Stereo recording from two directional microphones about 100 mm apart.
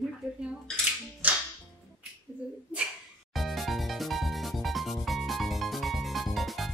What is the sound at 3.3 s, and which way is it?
Music, centre (ahead or behind).